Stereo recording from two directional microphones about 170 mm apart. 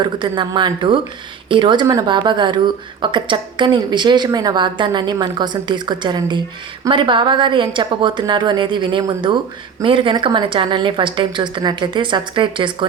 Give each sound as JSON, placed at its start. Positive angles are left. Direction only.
{"t": 0.0, "sound": "a woman's voice", "side_deg": -25}